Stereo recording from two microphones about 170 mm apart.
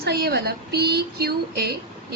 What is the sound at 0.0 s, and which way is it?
A woman's voice, 70° right (ahead or behind).